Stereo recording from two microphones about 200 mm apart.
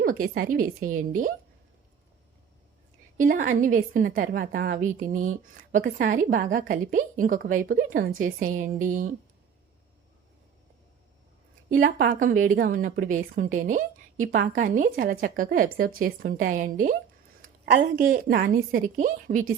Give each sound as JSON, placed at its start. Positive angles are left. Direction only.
{"t": 0.0, "sound": "a woman's voice", "side_deg": -45}
{"t": 3.2, "sound": "a woman's voice", "side_deg": -40}
{"t": 11.7, "sound": "a woman's voice", "side_deg": -45}
{"t": 17.7, "sound": "a woman's voice", "side_deg": -55}